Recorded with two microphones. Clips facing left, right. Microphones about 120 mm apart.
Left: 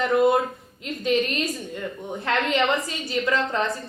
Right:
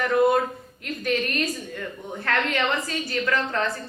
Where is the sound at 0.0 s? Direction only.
20° left (ahead or behind).